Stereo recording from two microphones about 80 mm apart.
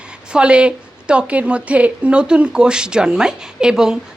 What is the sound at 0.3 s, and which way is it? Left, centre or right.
A woman's voice, centre.